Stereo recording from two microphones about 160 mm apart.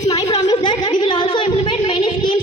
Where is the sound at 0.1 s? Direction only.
25° left (ahead or behind).